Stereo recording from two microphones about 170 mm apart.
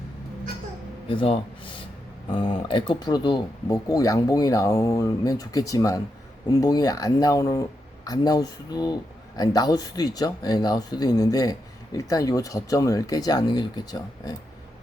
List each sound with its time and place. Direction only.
1.0 s speech: 30° left (ahead or behind)